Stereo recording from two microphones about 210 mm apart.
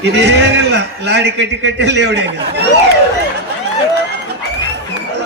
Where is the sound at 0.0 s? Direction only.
55° right (ahead or behind).